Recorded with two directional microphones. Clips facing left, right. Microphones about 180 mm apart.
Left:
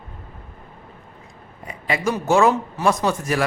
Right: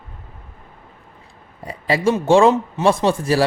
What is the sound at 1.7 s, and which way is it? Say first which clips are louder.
Speech: right 5 dB; 30° right (ahead or behind).